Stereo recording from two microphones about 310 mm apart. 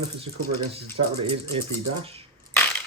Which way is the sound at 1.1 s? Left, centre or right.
Centre.